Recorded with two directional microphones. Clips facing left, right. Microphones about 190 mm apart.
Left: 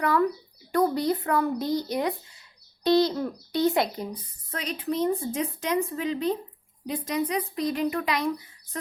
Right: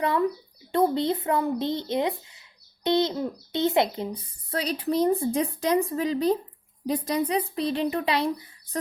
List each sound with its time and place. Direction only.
0.0 s speech: 25° right (ahead or behind)
4.5 s speech: 35° right (ahead or behind)